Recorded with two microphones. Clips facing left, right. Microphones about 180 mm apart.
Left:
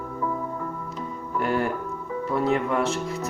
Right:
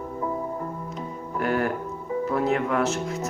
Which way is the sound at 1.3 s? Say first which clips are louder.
Even; centre (ahead or behind).